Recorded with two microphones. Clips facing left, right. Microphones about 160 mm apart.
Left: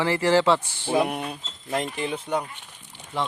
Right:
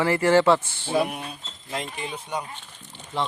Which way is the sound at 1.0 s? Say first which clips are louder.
Left 4 dB; 55° left (ahead or behind).